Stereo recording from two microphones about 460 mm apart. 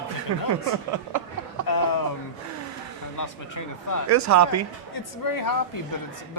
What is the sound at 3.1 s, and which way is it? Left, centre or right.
Speech, left.